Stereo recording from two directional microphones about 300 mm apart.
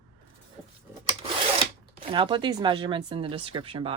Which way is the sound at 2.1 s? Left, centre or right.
Centre.